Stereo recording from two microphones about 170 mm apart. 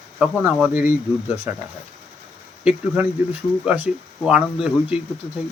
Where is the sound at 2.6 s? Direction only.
5° right (ahead or behind).